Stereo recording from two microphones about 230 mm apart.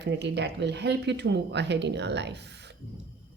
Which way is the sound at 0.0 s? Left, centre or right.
Right.